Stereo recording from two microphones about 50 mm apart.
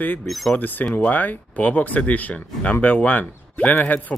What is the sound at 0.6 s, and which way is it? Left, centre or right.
Speech, left.